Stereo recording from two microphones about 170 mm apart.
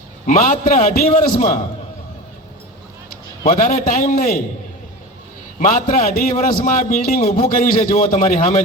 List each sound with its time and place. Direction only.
0.3 s a man's voice: 50° left (ahead or behind)
3.4 s a man's voice: 50° left (ahead or behind)
5.5 s a man's voice: 50° left (ahead or behind)